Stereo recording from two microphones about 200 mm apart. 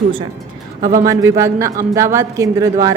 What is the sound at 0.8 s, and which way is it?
A woman's voice, 15° right (ahead or behind).